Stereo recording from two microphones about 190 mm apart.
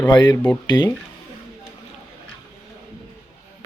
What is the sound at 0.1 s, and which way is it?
Speech, 20° left (ahead or behind).